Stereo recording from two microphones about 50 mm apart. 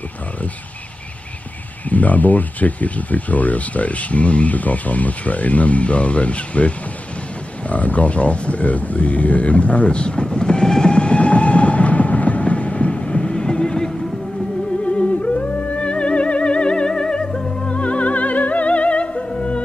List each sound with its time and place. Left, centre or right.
1.9 s speech: left
7.6 s a sound: left
14.9 s music: left